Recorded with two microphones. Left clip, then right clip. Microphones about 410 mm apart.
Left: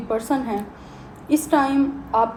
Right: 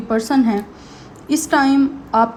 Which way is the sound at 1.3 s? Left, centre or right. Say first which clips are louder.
Right 3 dB; right.